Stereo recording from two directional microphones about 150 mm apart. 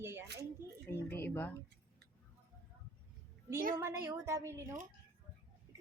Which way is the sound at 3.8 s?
15° right (ahead or behind).